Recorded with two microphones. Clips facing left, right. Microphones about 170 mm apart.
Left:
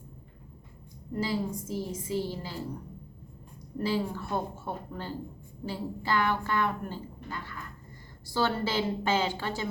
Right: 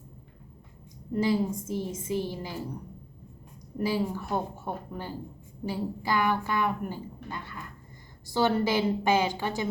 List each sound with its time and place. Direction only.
1.1 s a woman's voice: 20° right (ahead or behind)
3.8 s a woman's voice: 10° right (ahead or behind)